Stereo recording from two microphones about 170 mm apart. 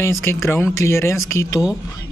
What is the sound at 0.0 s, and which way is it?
Speech, 15° left (ahead or behind).